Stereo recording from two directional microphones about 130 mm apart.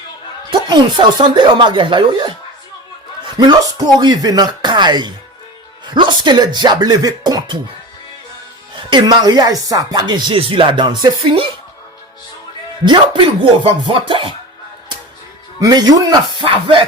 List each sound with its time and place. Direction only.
0.7 s speech: 35° right (ahead or behind)
3.4 s speech: 30° right (ahead or behind)
8.7 s speech: 35° right (ahead or behind)
12.8 s speech: 40° right (ahead or behind)
15.6 s speech: 30° right (ahead or behind)